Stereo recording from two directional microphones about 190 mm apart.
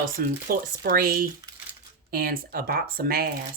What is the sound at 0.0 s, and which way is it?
Speech, 50° right (ahead or behind).